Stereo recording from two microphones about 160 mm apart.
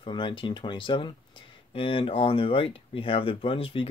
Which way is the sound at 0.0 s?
30° left (ahead or behind).